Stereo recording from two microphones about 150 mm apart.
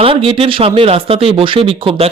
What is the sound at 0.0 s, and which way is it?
Speech, 40° right (ahead or behind).